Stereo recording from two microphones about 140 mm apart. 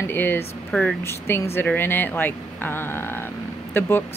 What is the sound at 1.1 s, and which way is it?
Speech, 15° left (ahead or behind).